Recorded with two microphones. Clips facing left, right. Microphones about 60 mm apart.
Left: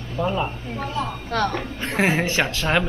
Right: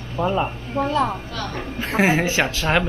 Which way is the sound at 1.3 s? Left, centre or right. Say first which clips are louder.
Left 7 dB; left.